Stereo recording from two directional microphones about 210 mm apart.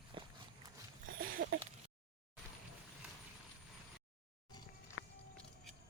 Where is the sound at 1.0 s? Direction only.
45° right (ahead or behind).